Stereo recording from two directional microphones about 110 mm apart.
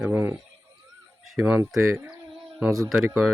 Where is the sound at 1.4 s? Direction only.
10° right (ahead or behind).